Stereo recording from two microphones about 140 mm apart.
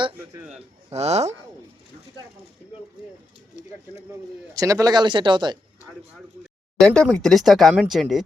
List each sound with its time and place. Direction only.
0.9 s speech: 50° right (ahead or behind)
4.1 s speech: 25° right (ahead or behind)
6.7 s speech: 5° left (ahead or behind)